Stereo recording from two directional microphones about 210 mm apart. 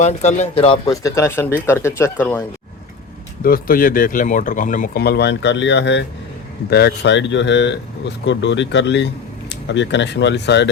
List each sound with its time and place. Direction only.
0.0 s speech: 35° left (ahead or behind)
0.9 s speech: 15° left (ahead or behind)
3.4 s speech: 45° left (ahead or behind)